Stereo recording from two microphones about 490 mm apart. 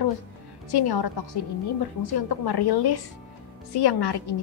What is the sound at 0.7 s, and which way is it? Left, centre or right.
A woman's voice, left.